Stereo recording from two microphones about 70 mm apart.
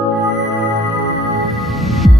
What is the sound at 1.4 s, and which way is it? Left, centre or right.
Music, centre.